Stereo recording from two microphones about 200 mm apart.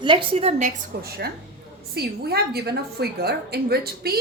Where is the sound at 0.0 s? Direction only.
25° right (ahead or behind).